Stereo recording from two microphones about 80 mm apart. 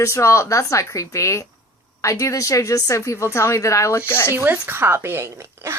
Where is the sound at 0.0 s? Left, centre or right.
Left.